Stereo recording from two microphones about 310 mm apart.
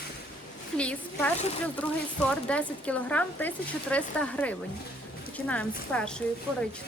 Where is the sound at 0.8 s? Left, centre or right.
Centre.